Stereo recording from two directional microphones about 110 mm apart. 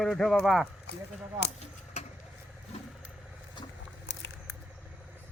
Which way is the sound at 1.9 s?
85° left.